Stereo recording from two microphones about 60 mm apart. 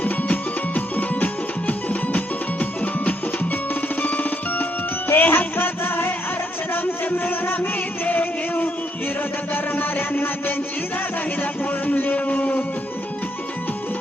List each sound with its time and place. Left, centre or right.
0.0 s music: left
5.0 s music: left
11.9 s a sound: left